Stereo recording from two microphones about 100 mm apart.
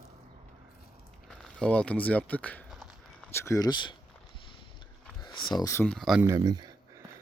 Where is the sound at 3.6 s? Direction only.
50° left (ahead or behind).